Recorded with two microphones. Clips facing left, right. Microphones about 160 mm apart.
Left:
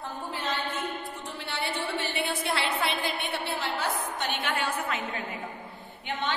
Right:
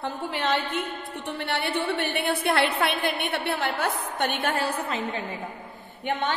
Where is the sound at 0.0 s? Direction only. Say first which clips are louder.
Right 6 dB; 75° right (ahead or behind).